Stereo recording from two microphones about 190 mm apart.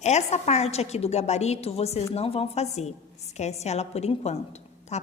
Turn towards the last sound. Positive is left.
turn(degrees=35)  # may be behind; listen again after turning